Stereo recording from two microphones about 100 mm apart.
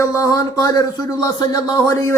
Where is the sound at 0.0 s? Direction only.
35° left (ahead or behind).